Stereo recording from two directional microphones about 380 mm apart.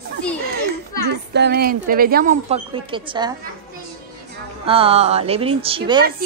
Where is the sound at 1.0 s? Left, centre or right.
Right.